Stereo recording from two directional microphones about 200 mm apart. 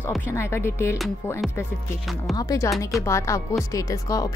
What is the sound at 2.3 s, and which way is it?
Speech, 15° left (ahead or behind).